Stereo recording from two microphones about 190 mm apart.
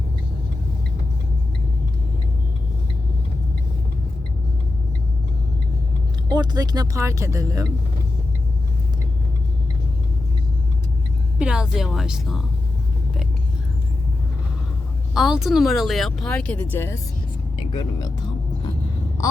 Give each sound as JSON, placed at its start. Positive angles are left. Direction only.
{"t": 6.2, "sound": "speech", "side_deg": -25}
{"t": 11.3, "sound": "speech", "side_deg": -5}
{"t": 15.1, "sound": "speech", "side_deg": 0}
{"t": 17.7, "sound": "speech", "side_deg": 25}
{"t": 19.2, "sound": "a sound", "side_deg": 20}